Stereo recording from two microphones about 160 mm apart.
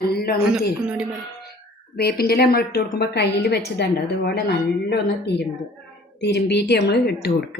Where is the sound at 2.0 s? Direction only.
75° left (ahead or behind).